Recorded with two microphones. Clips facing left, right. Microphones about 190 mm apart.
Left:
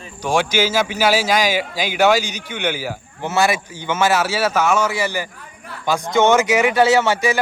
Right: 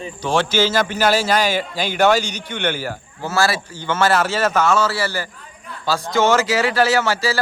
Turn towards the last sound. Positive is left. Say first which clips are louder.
# left 3 dB
turn(degrees=20)  # may be behind; listen again after turning